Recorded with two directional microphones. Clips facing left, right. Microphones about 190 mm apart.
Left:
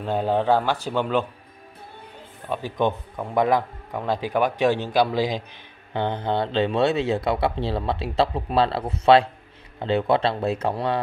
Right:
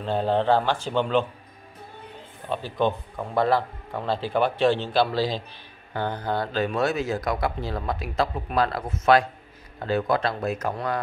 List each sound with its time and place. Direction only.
0.0 s a man's voice: 10° left (ahead or behind)
2.5 s a man's voice: 15° left (ahead or behind); by 11.0 s 30° left (ahead or behind)